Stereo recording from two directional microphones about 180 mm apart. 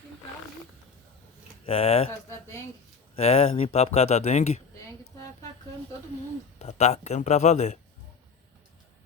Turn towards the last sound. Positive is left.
turn(degrees=40)  # may be behind; listen again after turning